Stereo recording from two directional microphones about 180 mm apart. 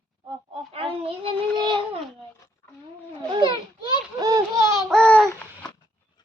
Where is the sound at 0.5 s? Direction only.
30° right (ahead or behind).